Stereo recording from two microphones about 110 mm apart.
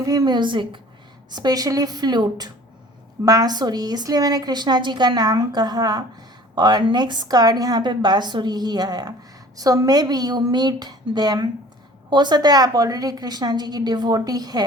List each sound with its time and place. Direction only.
0.0 s a woman's voice: 35° right (ahead or behind)
1.3 s a woman's voice: 40° right (ahead or behind)